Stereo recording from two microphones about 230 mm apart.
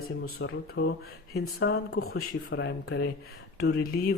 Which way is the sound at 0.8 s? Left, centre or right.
Left.